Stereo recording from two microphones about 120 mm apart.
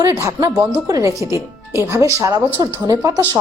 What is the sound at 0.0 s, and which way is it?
A woman's voice, 25° right (ahead or behind).